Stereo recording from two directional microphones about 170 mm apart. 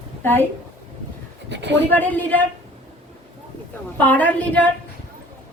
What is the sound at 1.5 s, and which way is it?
Speech, 90° right.